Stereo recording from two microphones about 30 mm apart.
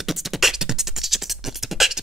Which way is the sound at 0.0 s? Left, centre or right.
Centre.